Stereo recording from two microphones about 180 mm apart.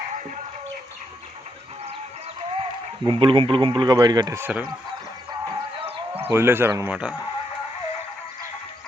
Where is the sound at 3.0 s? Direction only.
25° right (ahead or behind); by 4.6 s 10° right (ahead or behind).